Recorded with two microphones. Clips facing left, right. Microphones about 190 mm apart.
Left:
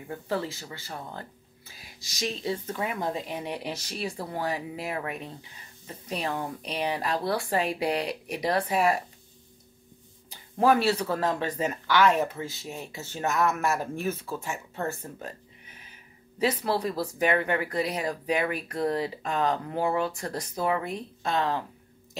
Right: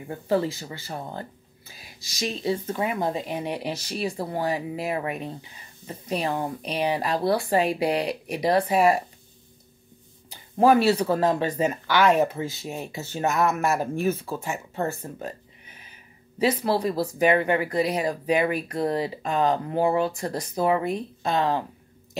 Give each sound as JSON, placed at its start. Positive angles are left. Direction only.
{"t": 0.3, "sound": "speech", "side_deg": -15}
{"t": 10.6, "sound": "speech", "side_deg": -10}
{"t": 16.3, "sound": "speech", "side_deg": -10}